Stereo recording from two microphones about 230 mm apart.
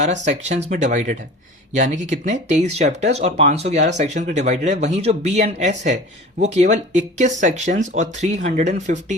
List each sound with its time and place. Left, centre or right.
0.0 s speech: right